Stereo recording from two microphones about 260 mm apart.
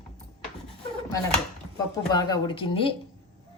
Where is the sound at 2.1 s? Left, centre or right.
Centre.